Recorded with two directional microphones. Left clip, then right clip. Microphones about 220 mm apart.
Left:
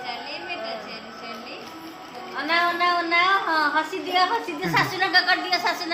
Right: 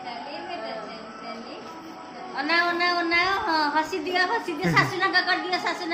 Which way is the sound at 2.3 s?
Centre (ahead or behind).